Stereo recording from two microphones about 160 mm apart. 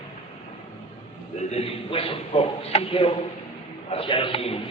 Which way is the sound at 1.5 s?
35° left (ahead or behind).